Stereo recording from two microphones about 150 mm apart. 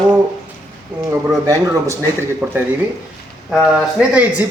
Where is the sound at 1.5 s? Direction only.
20° right (ahead or behind).